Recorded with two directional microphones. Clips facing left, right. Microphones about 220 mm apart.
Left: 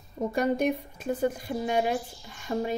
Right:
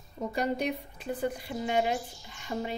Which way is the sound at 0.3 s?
50° left (ahead or behind).